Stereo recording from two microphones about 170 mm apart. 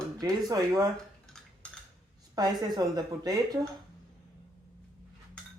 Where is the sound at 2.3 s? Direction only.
25° right (ahead or behind).